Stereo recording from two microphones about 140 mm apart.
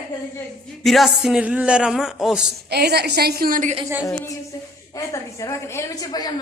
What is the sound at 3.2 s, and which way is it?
Speech, 90° right.